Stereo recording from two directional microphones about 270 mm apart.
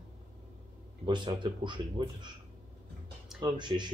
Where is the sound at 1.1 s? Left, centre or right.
Centre.